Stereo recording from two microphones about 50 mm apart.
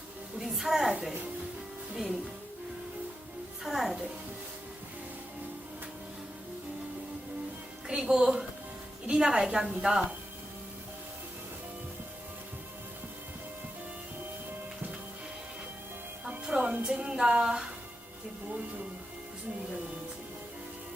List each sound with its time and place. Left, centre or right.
0.3 s a sound: centre
3.6 s music: centre
7.9 s music: centre
9.0 s a woman's voice: centre
16.5 s music: right
16.8 s a sound: centre